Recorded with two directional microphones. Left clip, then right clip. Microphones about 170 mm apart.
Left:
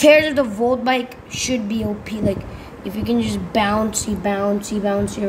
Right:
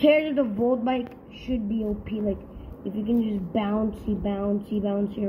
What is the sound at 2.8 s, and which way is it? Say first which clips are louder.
Speech: left 5 dB; 65° left (ahead or behind).